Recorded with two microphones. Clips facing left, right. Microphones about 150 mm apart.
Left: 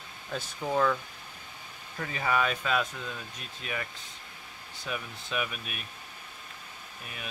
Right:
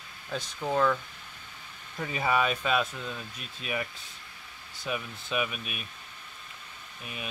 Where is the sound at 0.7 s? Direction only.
5° left (ahead or behind).